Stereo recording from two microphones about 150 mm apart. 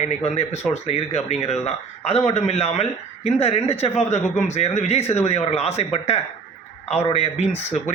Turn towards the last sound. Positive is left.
turn(degrees=45)  # may be behind; listen again after turning